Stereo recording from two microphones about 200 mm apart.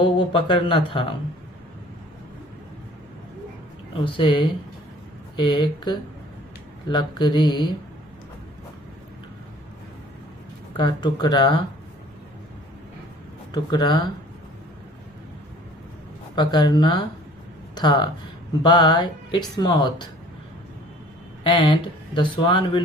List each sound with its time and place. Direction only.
0.0 s speech: 25° left (ahead or behind)
3.9 s speech: 25° left (ahead or behind)
10.8 s speech: 25° left (ahead or behind)
13.5 s speech: 20° left (ahead or behind)
16.3 s speech: 20° left (ahead or behind)
21.4 s speech: 25° left (ahead or behind)